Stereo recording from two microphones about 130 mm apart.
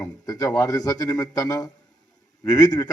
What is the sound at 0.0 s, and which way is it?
A man's voice, 25° left (ahead or behind).